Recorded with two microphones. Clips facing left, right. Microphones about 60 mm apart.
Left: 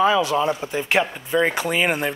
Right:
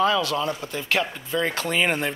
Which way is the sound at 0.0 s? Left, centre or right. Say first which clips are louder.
Left 4 dB; centre.